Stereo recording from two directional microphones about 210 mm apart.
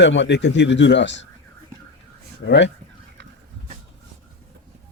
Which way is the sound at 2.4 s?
55° left (ahead or behind).